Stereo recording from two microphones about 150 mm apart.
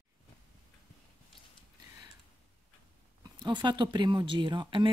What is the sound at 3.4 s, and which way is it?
Speech, 30° right (ahead or behind).